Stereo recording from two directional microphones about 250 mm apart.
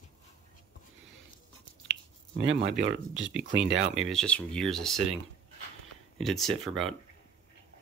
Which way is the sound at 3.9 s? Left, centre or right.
Centre.